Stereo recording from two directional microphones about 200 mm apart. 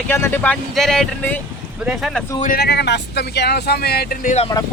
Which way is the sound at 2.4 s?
45° left (ahead or behind).